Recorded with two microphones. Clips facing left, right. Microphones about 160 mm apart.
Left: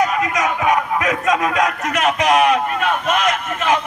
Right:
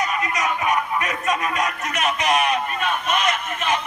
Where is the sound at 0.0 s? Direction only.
90° left.